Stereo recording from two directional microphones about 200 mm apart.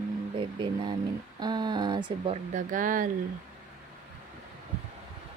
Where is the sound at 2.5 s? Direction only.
40° right (ahead or behind).